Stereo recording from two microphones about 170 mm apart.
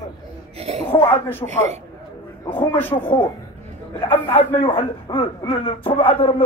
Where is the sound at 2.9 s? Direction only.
30° left (ahead or behind).